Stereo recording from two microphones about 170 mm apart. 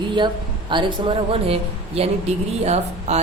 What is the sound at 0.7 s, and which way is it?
A woman's voice, 30° right (ahead or behind).